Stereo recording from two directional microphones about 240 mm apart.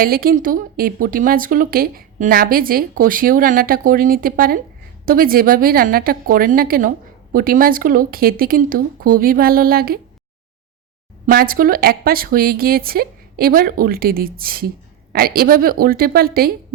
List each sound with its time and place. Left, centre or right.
0.0 s speech: right
11.3 s speech: right